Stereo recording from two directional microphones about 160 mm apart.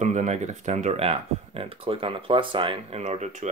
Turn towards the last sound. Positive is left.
turn(degrees=-45)  # may be behind; listen again after turning